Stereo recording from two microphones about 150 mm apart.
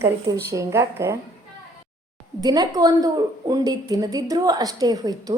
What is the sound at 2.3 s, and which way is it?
A woman's voice, 25° right (ahead or behind).